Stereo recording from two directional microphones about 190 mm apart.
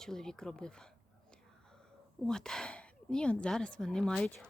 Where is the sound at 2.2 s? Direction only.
5° left (ahead or behind).